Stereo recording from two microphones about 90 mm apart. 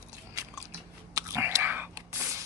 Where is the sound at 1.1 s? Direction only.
30° right (ahead or behind).